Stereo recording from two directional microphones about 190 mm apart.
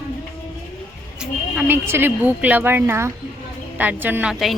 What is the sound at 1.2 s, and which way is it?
A woman's voice, 5° right (ahead or behind).